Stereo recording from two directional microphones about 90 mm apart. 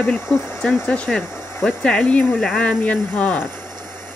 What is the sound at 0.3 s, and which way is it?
Speech, 15° left (ahead or behind).